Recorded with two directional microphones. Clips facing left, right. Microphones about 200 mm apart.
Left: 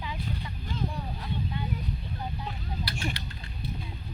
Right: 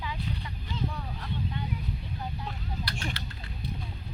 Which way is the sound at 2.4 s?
5° left (ahead or behind).